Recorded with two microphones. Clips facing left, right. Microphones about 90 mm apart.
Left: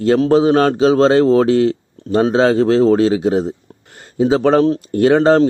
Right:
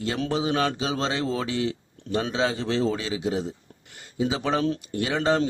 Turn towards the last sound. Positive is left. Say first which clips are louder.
# left 12 dB
turn(degrees=45)  # may be behind; listen again after turning